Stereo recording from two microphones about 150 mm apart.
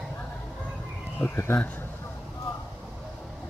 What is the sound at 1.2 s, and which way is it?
Speech, 15° left (ahead or behind).